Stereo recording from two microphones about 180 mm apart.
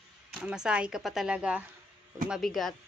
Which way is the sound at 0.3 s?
5° right (ahead or behind).